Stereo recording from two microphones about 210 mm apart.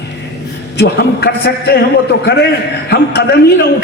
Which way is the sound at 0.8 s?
50° left (ahead or behind).